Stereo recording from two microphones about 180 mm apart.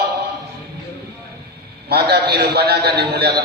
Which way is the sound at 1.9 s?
60° right (ahead or behind).